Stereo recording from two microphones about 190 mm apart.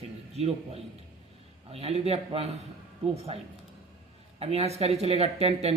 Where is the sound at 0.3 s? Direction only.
30° right (ahead or behind).